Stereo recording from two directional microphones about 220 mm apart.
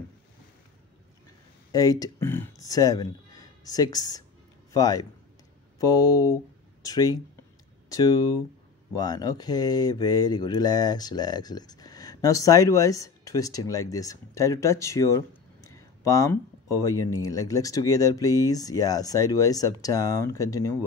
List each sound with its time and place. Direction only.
1.7 s speech: 15° left (ahead or behind)